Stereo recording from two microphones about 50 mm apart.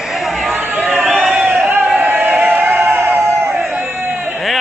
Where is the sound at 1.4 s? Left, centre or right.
Right.